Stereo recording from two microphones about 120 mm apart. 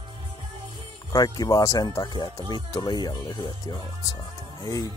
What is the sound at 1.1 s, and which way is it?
Speech, 30° left (ahead or behind).